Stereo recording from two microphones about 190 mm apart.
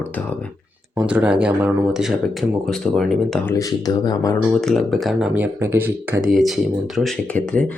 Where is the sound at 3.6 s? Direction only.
20° left (ahead or behind).